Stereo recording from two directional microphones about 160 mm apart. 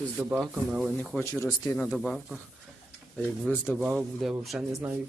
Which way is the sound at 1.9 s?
Centre (ahead or behind).